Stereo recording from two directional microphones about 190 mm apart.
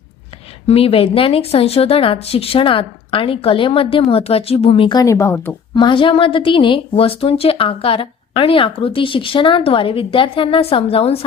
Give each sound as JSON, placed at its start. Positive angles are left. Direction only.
{"t": 0.7, "sound": "a woman's voice", "side_deg": 30}
{"t": 5.7, "sound": "a woman's voice", "side_deg": 25}